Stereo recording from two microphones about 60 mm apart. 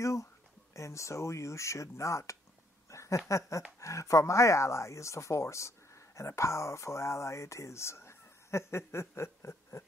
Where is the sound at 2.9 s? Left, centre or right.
Left.